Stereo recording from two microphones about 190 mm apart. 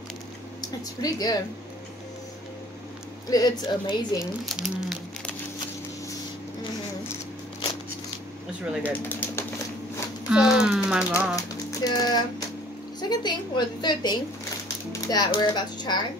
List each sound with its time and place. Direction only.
0.6 s speech: 20° left (ahead or behind)
3.3 s a woman's voice: 20° left (ahead or behind)
4.2 s speech: centre (ahead or behind)
8.8 s speech: 10° left (ahead or behind)
10.3 s speech: 5° right (ahead or behind)
11.3 s a woman's voice: 20° left (ahead or behind)